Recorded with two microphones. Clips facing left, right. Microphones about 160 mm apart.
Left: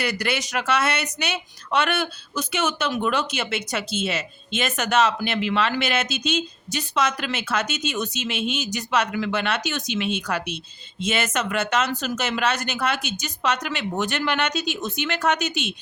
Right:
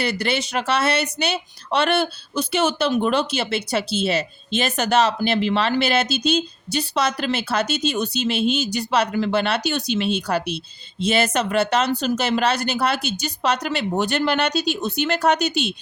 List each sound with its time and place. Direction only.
0.0 s speech: 30° right (ahead or behind)